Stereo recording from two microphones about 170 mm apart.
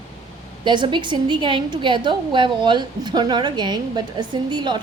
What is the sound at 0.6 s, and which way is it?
A woman's voice, 25° right (ahead or behind).